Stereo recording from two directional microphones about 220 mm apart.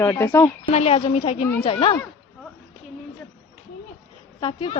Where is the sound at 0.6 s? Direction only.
30° left (ahead or behind).